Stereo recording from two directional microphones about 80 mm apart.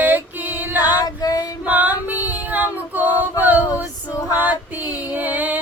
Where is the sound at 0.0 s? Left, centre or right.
Right.